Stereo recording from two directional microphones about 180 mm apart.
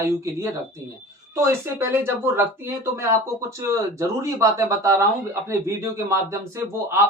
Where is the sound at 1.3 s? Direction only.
15° right (ahead or behind).